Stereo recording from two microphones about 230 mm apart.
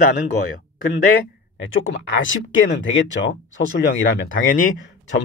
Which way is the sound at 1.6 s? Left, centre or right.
Left.